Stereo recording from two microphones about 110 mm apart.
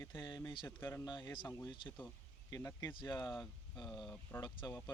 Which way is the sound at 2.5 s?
30° left (ahead or behind).